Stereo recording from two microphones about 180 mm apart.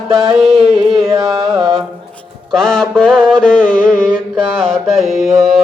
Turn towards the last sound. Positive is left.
turn(degrees=0)  # may be behind; listen again after turning